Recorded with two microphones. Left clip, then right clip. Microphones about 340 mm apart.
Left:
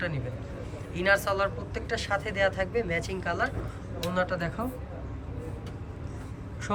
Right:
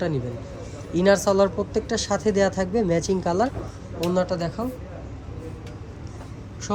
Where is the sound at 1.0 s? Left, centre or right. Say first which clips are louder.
Right 6 dB; centre.